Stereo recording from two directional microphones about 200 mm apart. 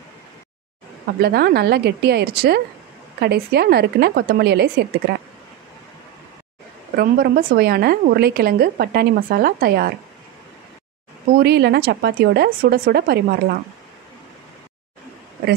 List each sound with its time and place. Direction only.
1.2 s a woman's voice: 50° right (ahead or behind)
7.0 s a woman's voice: 50° right (ahead or behind)
11.3 s a woman's voice: 55° right (ahead or behind)